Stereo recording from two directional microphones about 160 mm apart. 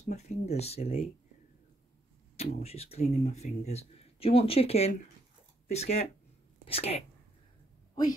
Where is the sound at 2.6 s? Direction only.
40° left (ahead or behind).